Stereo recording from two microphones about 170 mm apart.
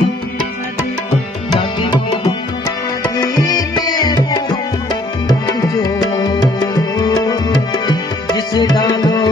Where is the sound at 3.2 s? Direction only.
25° left (ahead or behind).